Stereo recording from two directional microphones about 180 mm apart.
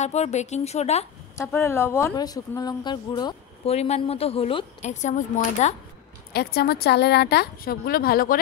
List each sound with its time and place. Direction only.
0.0 s a woman's voice: 40° left (ahead or behind)
1.3 s a woman's voice: 15° left (ahead or behind); by 5.8 s 40° left (ahead or behind)
6.3 s a woman's voice: 60° left (ahead or behind)